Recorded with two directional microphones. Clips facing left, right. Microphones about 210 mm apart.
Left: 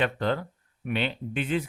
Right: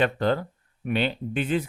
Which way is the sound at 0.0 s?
40° right (ahead or behind).